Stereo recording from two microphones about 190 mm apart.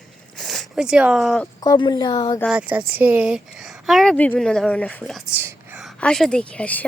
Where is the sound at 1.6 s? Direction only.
20° left (ahead or behind).